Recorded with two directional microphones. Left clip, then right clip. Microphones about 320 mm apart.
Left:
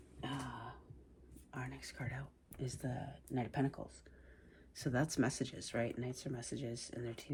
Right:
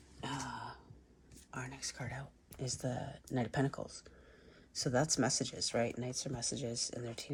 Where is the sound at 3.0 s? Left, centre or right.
Right.